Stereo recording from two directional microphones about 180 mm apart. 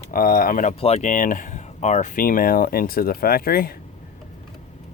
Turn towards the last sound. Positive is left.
turn(degrees=55)  # may be behind; listen again after turning